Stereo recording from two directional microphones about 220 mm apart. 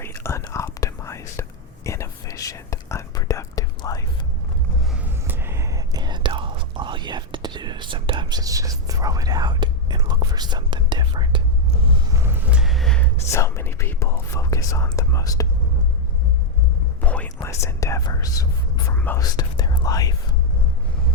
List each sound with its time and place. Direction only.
0.0 s whispering: 10° left (ahead or behind)
5.0 s whispering: 10° right (ahead or behind)
11.9 s vehicle: 15° right (ahead or behind)
13.3 s speech: 10° left (ahead or behind)
17.0 s whispering: 5° left (ahead or behind)
18.9 s speech: 10° left (ahead or behind)